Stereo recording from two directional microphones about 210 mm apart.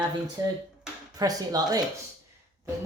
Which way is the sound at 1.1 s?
15° right (ahead or behind).